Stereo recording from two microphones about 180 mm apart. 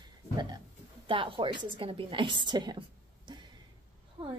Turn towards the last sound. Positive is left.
turn(degrees=-30)  # may be behind; listen again after turning